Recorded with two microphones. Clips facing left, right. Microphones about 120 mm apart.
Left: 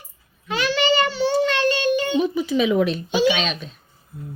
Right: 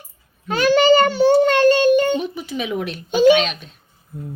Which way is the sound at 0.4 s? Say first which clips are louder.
Right 7 dB; 45° right (ahead or behind).